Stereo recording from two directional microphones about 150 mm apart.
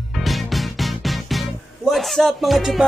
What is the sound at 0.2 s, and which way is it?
Music, centre (ahead or behind).